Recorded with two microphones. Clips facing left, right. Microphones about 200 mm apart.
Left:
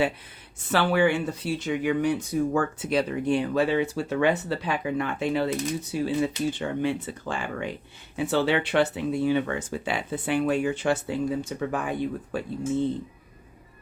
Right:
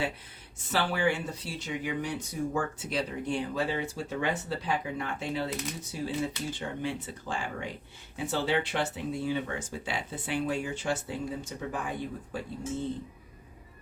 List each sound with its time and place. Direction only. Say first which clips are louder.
0.7 s speech: left 6 dB; 60° left (ahead or behind)